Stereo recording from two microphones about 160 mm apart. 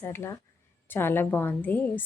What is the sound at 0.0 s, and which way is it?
A woman's voice, 15° left (ahead or behind).